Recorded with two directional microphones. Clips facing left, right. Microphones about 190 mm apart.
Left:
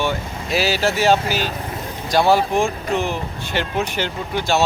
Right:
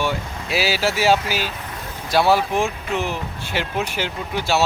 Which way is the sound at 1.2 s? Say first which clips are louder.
Left 3 dB; 45° left (ahead or behind).